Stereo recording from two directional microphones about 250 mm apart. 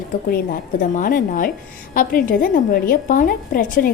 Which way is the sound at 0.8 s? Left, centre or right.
Left.